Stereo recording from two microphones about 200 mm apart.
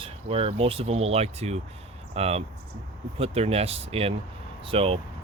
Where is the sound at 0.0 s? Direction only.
30° right (ahead or behind).